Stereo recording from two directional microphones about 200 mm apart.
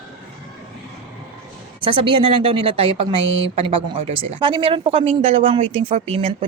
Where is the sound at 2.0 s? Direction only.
25° right (ahead or behind).